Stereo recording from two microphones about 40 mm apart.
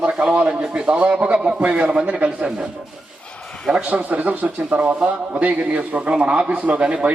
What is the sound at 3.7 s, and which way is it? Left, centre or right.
A man's voice, right.